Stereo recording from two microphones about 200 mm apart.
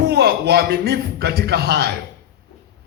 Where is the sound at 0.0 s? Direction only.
50° right (ahead or behind).